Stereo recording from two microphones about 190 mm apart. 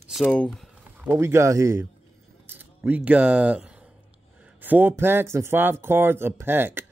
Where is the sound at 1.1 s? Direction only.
15° right (ahead or behind).